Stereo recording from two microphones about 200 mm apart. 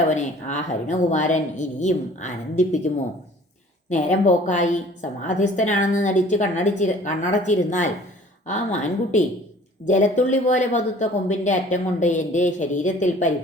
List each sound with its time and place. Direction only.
0.1 s a woman's voice: 35° left (ahead or behind)
3.8 s a woman's voice: 35° left (ahead or behind)